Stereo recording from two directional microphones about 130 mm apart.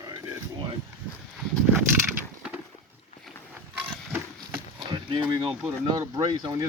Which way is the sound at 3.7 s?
15° right (ahead or behind).